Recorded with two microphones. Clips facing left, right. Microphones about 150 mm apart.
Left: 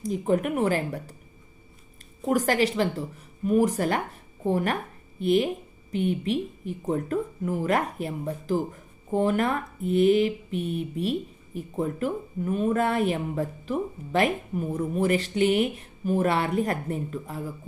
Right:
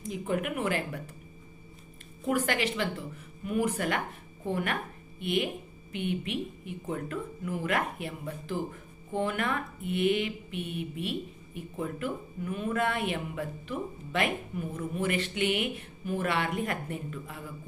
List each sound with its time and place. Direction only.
0.0 s speech: 40° left (ahead or behind)
2.2 s speech: 40° left (ahead or behind)